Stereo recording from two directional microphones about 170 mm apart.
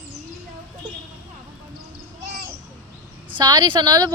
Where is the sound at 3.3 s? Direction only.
25° right (ahead or behind).